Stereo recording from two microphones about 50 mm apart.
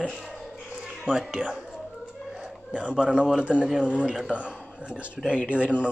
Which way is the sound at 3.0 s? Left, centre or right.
Centre.